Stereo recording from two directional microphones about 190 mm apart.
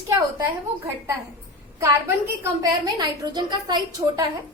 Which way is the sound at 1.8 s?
15° right (ahead or behind).